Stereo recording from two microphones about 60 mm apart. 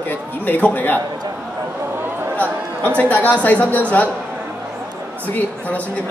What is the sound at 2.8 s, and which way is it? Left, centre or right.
A woman's voice, left.